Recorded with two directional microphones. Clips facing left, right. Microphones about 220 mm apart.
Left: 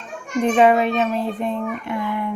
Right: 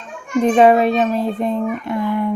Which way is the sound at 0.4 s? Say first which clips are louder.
Right 3 dB; 40° right (ahead or behind).